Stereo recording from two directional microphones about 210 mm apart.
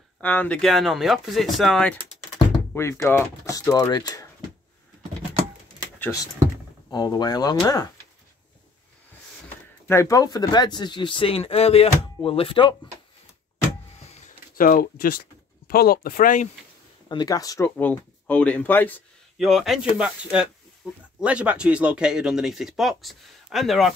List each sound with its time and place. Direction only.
0.2 s speech: 10° left (ahead or behind)
5.9 s power windows: 10° left (ahead or behind)
6.9 s speech: 20° left (ahead or behind)
9.8 s speech: 15° left (ahead or behind)
14.6 s speech: 40° left (ahead or behind)
17.1 s speech: 20° left (ahead or behind); by 23.9 s centre (ahead or behind)